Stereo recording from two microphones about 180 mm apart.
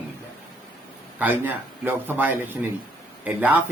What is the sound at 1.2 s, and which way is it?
A man's voice, 10° right (ahead or behind).